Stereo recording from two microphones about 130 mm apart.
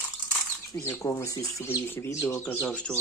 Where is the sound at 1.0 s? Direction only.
20° left (ahead or behind).